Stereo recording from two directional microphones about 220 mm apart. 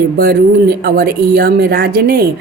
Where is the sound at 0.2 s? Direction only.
45° right (ahead or behind).